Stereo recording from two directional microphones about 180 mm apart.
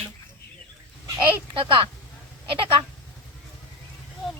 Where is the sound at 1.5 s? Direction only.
30° right (ahead or behind).